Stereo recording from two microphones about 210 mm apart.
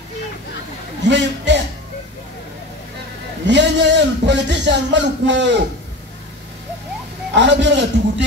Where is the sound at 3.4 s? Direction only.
55° right (ahead or behind).